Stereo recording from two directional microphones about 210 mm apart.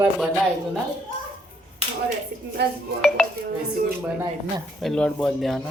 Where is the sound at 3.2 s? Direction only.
5° left (ahead or behind).